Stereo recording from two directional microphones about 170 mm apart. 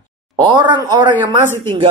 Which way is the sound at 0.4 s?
25° right (ahead or behind).